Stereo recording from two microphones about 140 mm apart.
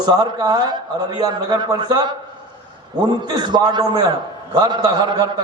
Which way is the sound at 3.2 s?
30° right (ahead or behind).